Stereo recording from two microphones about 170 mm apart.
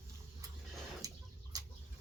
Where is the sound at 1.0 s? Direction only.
20° right (ahead or behind).